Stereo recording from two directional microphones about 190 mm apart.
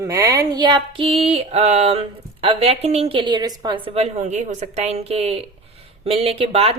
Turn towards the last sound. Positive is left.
turn(degrees=-30)  # may be behind; listen again after turning